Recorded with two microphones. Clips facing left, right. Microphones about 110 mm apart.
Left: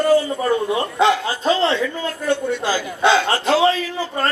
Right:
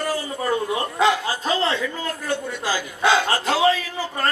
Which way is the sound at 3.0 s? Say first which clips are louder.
Left 2 dB; 25° left (ahead or behind).